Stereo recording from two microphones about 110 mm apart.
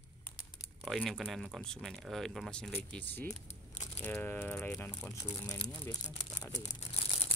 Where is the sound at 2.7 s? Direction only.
15° left (ahead or behind).